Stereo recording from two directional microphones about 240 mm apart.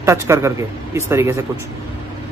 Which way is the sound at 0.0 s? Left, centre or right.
Centre.